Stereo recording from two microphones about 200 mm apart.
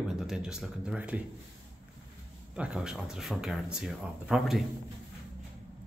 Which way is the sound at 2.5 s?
5° right (ahead or behind).